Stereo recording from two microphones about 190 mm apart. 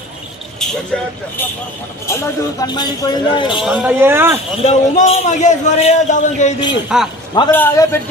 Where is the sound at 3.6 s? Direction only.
5° right (ahead or behind).